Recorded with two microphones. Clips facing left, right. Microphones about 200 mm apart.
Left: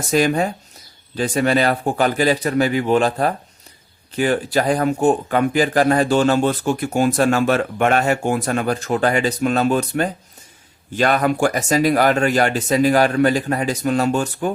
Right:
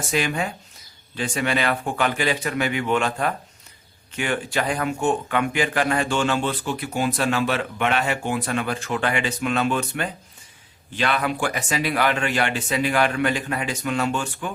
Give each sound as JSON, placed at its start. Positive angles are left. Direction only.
{"t": 0.1, "sound": "speech", "side_deg": 40}